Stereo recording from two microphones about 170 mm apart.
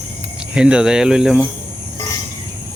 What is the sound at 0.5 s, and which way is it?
Speech, 5° right (ahead or behind).